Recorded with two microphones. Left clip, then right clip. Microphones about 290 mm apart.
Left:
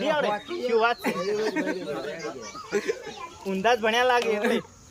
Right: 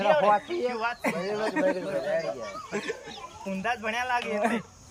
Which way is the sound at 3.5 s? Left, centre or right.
Left.